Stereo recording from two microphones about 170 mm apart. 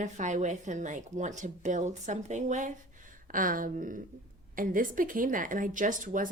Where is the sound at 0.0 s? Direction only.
45° right (ahead or behind).